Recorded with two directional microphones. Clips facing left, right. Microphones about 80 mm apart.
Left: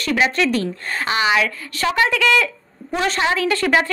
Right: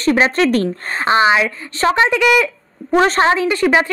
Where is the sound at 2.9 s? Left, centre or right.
Right.